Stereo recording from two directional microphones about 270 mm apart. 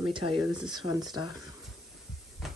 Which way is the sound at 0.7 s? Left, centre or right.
Centre.